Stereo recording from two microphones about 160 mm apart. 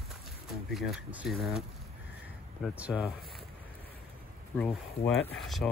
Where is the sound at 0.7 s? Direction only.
Centre (ahead or behind).